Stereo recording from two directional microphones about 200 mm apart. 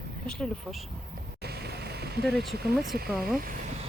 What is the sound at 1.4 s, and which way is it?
Vehicle, 55° right (ahead or behind).